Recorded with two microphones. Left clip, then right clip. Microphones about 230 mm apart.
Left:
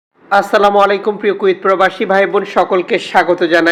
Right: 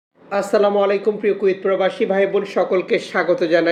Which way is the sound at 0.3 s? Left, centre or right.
Centre.